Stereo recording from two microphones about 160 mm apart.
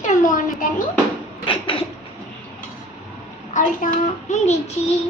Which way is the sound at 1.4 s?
35° left (ahead or behind).